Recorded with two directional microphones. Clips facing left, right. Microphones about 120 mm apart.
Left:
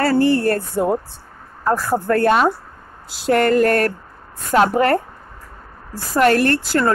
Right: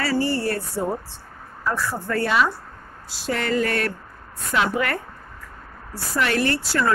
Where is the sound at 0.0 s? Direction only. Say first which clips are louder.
Left 7 dB; 55° left (ahead or behind).